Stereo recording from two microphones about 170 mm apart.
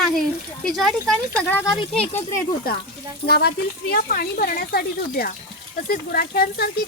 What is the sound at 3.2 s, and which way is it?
Speech, 70° left (ahead or behind).